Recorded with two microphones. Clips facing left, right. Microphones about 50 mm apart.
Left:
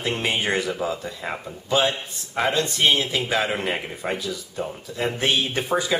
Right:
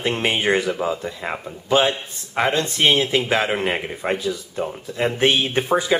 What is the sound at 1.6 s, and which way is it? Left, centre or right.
Speech, right.